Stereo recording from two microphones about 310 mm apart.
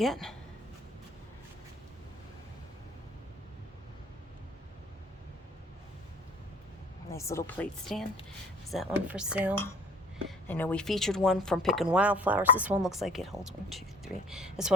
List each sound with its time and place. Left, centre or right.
0.0 s speech: centre
7.1 s speech: centre